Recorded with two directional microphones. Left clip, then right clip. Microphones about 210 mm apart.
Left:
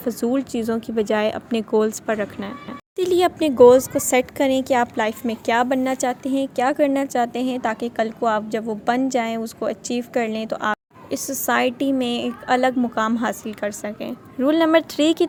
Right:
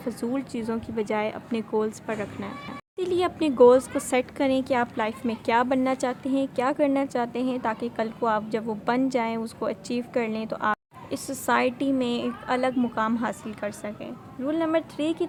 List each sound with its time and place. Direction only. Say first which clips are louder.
0.0 s speech: left 7 dB; 20° left (ahead or behind)
14.1 s a woman's voice: left 11 dB; 35° left (ahead or behind)